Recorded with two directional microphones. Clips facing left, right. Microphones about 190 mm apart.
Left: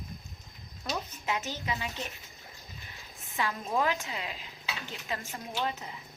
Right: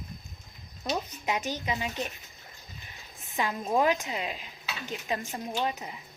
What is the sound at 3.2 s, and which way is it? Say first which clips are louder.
Speech: right 3 dB; 15° right (ahead or behind).